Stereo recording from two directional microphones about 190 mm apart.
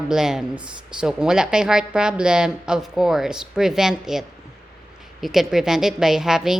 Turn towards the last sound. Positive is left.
turn(degrees=0)  # may be behind; listen again after turning